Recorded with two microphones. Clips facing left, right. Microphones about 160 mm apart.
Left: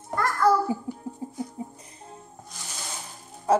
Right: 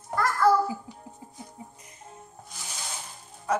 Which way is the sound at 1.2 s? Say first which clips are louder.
Left 13 dB; 30° left (ahead or behind).